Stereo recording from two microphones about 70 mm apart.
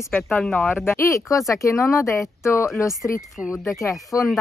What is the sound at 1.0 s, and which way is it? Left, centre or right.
Speech, left.